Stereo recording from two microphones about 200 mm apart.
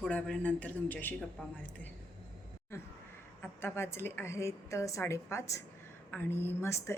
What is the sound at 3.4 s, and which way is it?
A woman's voice, 10° left (ahead or behind).